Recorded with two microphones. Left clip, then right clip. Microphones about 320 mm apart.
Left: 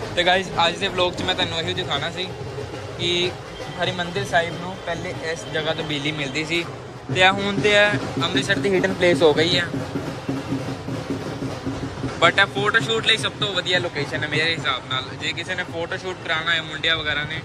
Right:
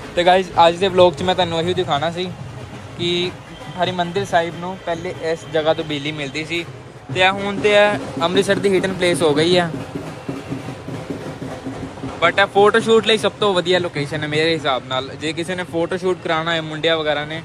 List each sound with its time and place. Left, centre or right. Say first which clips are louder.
0.1 s speech: right 5 dB; centre
4.8 s speech: right 5 dB; centre
5.5 s speech: right 6 dB; centre
12.2 s speech: right 4 dB; centre